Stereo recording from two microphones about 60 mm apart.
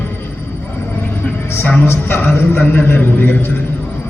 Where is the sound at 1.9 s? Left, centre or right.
Left.